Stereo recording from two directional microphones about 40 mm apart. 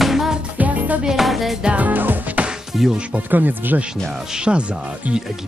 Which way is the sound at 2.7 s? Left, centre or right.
Centre.